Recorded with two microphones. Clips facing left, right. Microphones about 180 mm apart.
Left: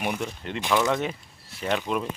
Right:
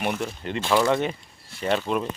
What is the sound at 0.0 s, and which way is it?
Speech, centre (ahead or behind).